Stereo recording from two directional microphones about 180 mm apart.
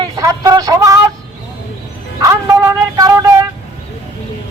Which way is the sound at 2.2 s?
20° right (ahead or behind).